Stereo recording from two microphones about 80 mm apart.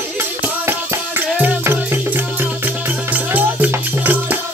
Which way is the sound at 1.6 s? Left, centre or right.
Right.